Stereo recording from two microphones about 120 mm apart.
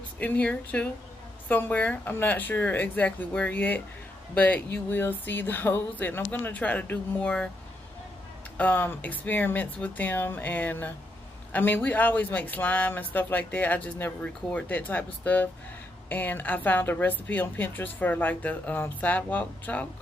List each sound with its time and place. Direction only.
0.2 s speech: 10° left (ahead or behind)
8.5 s speech: 15° left (ahead or behind)